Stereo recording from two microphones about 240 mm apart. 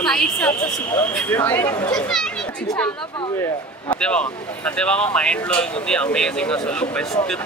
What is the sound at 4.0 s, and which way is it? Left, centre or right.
Speech, centre.